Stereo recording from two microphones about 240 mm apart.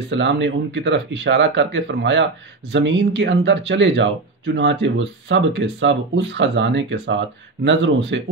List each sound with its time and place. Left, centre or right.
0.1 s speech: right